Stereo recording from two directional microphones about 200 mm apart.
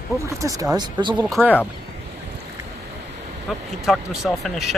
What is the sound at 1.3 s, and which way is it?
Speech, 5° right (ahead or behind).